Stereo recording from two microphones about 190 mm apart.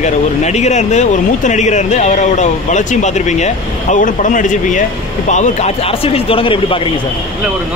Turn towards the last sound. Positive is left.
turn(degrees=30)  # may be behind; listen again after turning